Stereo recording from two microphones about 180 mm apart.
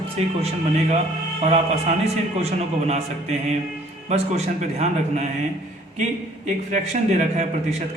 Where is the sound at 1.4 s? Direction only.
40° right (ahead or behind).